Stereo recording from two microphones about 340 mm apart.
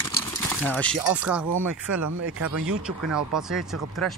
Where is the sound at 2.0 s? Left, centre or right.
Right.